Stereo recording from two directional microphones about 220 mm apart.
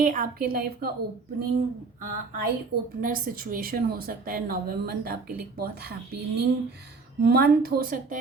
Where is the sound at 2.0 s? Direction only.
40° right (ahead or behind).